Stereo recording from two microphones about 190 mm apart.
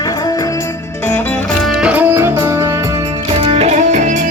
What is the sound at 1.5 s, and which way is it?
Music, centre (ahead or behind).